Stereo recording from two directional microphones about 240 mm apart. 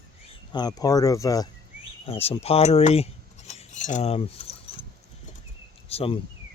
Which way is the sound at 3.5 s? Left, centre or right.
Left.